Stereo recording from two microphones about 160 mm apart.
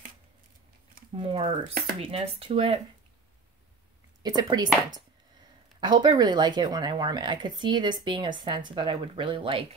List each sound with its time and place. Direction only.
1.1 s speech: 30° right (ahead or behind)
1.6 s dishes: 65° right (ahead or behind)
2.0 s speech: 40° right (ahead or behind)
4.2 s speech: 25° right (ahead or behind)
5.8 s speech: 25° right (ahead or behind)